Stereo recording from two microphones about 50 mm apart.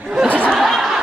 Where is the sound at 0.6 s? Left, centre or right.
Centre.